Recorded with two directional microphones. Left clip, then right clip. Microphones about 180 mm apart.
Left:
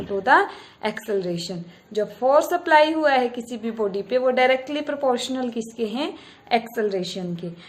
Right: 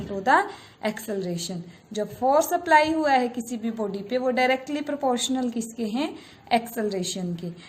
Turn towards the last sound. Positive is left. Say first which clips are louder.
# left 3 dB
turn(degrees=-35)  # may be behind; listen again after turning